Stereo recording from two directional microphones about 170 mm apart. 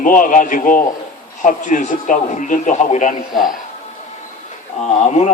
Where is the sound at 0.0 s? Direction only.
50° left (ahead or behind).